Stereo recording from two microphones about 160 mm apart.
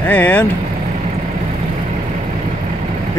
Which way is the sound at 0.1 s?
10° left (ahead or behind).